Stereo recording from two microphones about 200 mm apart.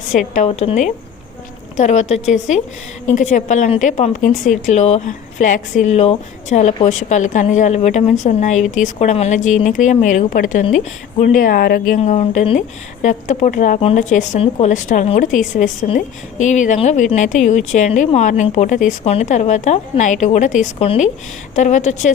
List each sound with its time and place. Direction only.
0.1 s speech: 40° left (ahead or behind)
11.9 s speech: 30° left (ahead or behind)